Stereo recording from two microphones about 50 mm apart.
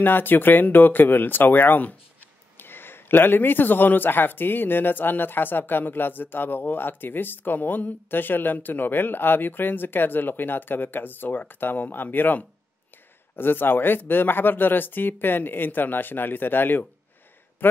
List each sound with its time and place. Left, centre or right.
0.0 s speech: left